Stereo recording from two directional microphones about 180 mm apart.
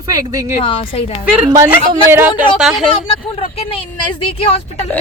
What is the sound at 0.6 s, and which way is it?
Speech, 30° left (ahead or behind).